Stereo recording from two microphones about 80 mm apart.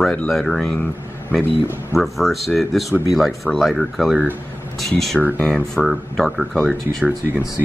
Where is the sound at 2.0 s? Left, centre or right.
Centre.